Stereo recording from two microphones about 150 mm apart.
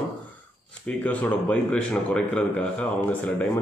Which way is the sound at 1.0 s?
10° left (ahead or behind).